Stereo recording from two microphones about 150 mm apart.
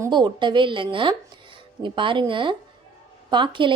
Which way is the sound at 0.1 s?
30° right (ahead or behind).